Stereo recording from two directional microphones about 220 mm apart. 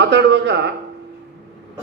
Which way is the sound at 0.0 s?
50° right (ahead or behind).